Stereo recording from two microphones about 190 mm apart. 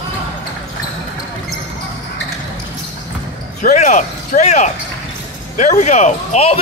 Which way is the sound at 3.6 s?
40° left (ahead or behind).